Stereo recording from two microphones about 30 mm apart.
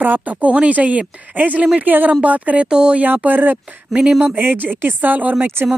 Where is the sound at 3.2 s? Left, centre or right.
Right.